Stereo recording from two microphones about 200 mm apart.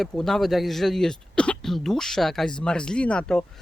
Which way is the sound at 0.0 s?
Centre (ahead or behind).